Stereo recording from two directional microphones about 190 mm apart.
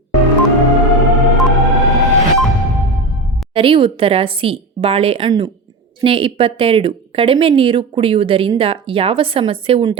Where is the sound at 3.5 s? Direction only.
30° right (ahead or behind).